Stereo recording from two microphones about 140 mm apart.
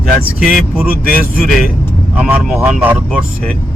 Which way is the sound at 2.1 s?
10° right (ahead or behind).